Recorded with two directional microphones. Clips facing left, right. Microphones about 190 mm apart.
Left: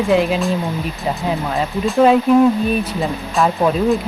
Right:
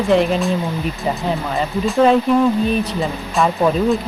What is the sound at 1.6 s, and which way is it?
Speech, centre (ahead or behind).